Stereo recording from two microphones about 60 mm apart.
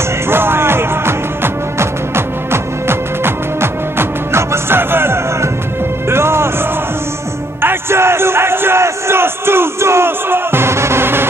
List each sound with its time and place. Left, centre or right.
0.3 s music: right
7.6 s crowd: right